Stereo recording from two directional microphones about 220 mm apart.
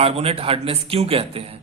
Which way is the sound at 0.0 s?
25° right (ahead or behind).